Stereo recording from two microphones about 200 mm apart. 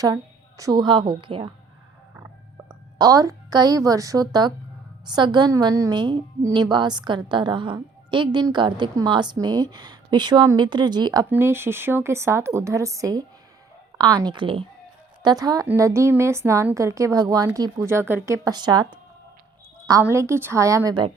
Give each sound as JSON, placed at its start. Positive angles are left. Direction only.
{"t": 0.0, "sound": "a woman's voice", "side_deg": -15}
{"t": 3.0, "sound": "a woman's voice", "side_deg": -15}
{"t": 20.1, "sound": "a woman's voice", "side_deg": -15}